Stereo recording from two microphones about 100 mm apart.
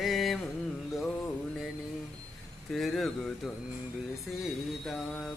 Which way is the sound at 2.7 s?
5° left (ahead or behind).